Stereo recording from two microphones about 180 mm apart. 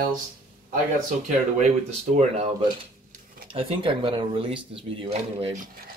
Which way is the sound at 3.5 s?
30° right (ahead or behind).